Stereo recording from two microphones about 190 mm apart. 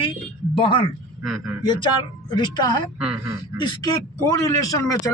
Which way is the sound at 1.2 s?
Centre (ahead or behind).